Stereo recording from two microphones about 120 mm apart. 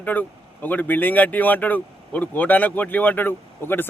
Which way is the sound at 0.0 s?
15° left (ahead or behind).